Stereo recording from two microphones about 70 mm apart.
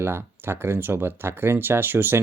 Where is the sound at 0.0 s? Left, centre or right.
Right.